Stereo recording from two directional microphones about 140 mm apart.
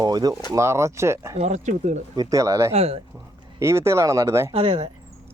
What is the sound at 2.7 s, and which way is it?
Speech, 45° right (ahead or behind).